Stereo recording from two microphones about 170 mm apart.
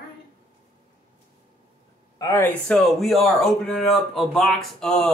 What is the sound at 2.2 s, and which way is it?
Speech, 15° left (ahead or behind).